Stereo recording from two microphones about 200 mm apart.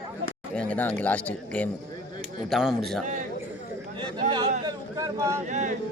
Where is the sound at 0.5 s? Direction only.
5° left (ahead or behind).